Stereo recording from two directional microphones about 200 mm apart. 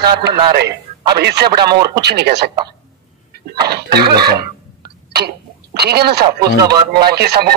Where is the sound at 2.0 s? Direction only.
55° right (ahead or behind).